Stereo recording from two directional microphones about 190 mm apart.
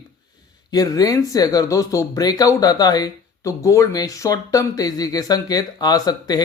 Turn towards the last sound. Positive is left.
turn(degrees=20)  # may be behind; listen again after turning